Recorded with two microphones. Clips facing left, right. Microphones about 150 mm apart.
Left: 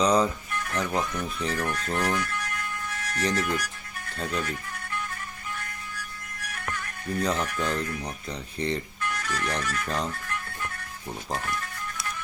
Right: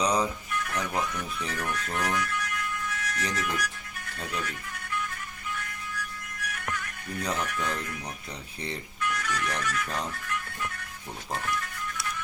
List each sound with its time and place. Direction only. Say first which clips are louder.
0.0 s speech: left 4 dB; 10° right (ahead or behind)
0.5 s speech: left 2 dB; 35° left (ahead or behind)
5.5 s music: right 1 dB; 35° left (ahead or behind)
8.5 s speech: left 8 dB; 5° right (ahead or behind)
9.0 s speech: even; 35° left (ahead or behind)